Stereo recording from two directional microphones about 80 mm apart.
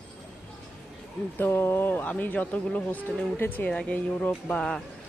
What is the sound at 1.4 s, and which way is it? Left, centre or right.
Speech, left.